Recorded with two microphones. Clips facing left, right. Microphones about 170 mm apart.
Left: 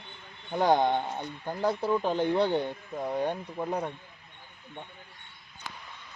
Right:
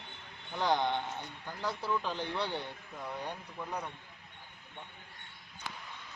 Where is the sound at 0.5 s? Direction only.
45° left (ahead or behind).